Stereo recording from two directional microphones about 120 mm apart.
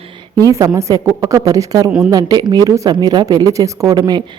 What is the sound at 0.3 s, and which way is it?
Speech, 30° right (ahead or behind).